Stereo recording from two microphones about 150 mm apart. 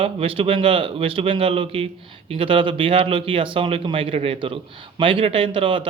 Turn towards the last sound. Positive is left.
turn(degrees=-35)  # may be behind; listen again after turning